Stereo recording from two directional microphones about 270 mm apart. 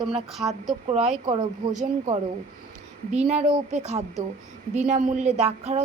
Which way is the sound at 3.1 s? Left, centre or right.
Right.